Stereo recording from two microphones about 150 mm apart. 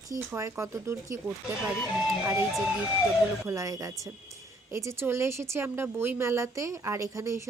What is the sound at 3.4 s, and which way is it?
Speech, 20° right (ahead or behind).